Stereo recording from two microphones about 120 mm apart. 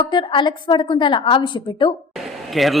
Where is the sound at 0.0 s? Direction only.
40° left (ahead or behind).